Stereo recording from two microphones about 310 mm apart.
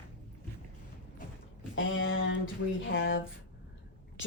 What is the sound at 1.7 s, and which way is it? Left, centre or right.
Speech, left.